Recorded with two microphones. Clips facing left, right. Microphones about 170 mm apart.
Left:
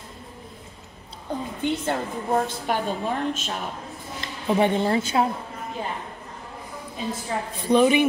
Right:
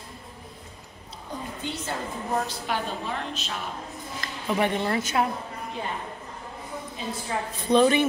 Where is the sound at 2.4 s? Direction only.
50° left (ahead or behind).